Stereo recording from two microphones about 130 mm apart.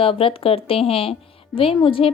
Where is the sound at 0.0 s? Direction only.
45° left (ahead or behind).